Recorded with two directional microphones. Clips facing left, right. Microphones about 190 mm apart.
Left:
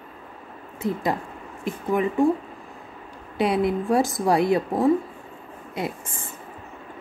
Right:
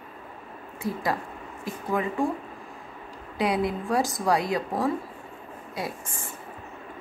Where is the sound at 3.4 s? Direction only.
25° left (ahead or behind).